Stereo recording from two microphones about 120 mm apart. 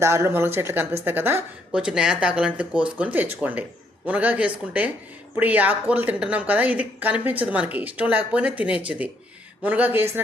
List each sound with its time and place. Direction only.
0.0 s a woman's voice: 20° right (ahead or behind)
1.7 s a woman's voice: 5° right (ahead or behind)